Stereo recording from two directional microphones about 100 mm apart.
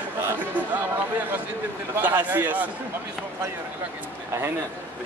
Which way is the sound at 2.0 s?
20° right (ahead or behind).